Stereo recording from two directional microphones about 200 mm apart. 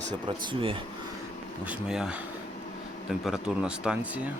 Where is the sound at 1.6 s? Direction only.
5° right (ahead or behind).